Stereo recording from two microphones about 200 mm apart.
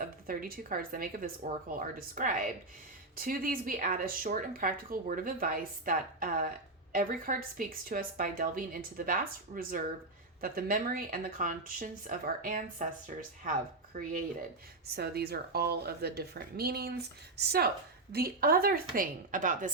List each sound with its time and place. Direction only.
0.0 s speech: 45° right (ahead or behind)
14.9 s speech: 55° right (ahead or behind)